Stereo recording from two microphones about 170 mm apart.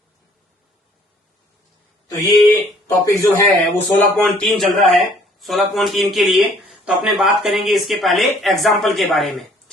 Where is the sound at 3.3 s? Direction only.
20° left (ahead or behind).